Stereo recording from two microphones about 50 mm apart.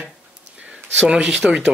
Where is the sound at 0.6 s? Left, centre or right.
Centre.